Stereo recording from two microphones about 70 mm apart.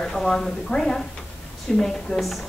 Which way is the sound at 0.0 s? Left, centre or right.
Centre.